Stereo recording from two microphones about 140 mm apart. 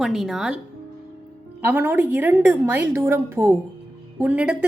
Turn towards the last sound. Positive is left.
turn(degrees=-10)  # may be behind; listen again after turning